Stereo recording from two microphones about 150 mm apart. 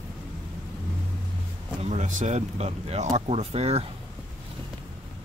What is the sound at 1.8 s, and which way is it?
Speech, 50° right (ahead or behind).